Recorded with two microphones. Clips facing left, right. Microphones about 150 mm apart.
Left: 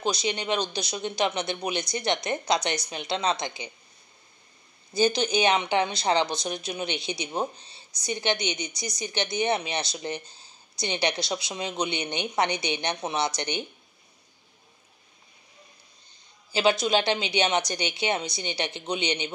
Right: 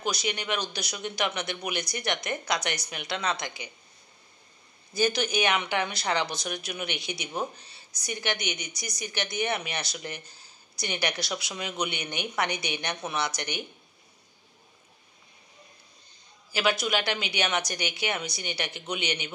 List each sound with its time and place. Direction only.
0.0 s speech: 25° left (ahead or behind)
4.9 s speech: 25° left (ahead or behind)
16.5 s speech: 25° left (ahead or behind)